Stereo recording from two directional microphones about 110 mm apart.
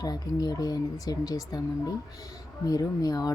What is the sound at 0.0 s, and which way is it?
Speech, 35° left (ahead or behind).